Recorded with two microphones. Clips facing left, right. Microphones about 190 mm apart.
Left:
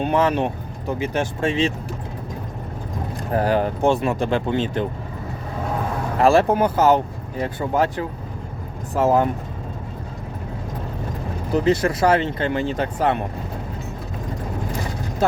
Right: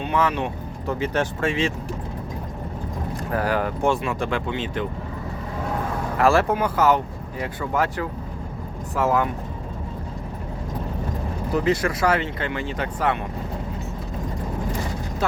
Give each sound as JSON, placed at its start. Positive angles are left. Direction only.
{"t": 0.0, "sound": "speech", "side_deg": 40}
{"t": 0.9, "sound": "speech", "side_deg": 10}
{"t": 3.3, "sound": "speech", "side_deg": 25}
{"t": 4.0, "sound": "speech", "side_deg": 40}
{"t": 6.1, "sound": "speech", "side_deg": 20}
{"t": 6.5, "sound": "speech", "side_deg": 40}
{"t": 9.0, "sound": "speech", "side_deg": 35}
{"t": 11.7, "sound": "speech", "side_deg": 25}